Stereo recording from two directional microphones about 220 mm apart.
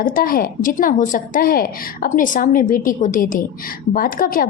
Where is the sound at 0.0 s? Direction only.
40° left (ahead or behind).